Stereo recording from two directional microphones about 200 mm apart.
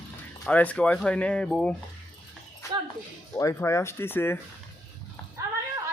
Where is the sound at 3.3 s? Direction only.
15° left (ahead or behind).